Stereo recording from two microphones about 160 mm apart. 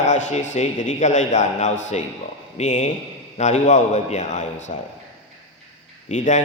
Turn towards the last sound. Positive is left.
turn(degrees=50)  # may be behind; listen again after turning